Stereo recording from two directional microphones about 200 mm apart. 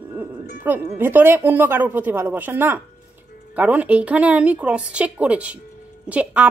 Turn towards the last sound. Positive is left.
turn(degrees=-5)  # may be behind; listen again after turning